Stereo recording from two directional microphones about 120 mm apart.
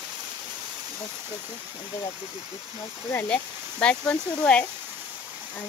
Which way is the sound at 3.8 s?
10° left (ahead or behind).